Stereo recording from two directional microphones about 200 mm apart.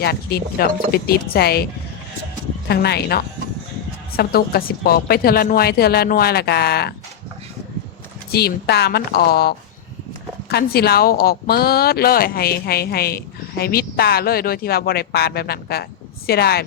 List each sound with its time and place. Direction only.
0.0 s speech: 55° left (ahead or behind)
2.6 s speech: 55° left (ahead or behind)
8.3 s speech: 50° left (ahead or behind)